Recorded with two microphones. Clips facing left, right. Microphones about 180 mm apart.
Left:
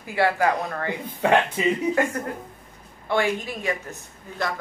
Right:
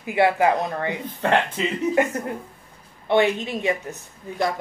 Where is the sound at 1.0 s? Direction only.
10° left (ahead or behind).